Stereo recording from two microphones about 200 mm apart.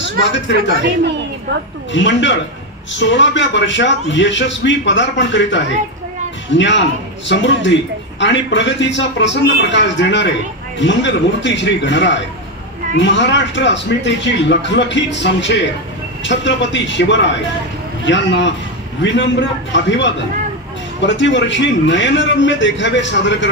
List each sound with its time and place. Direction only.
0.2 s speech: 65° left (ahead or behind)
1.9 s speech: 65° left (ahead or behind)